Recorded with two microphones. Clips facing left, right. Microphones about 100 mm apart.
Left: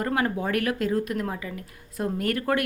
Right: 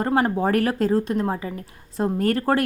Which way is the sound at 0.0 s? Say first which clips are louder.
Right 5 dB; 30° right (ahead or behind).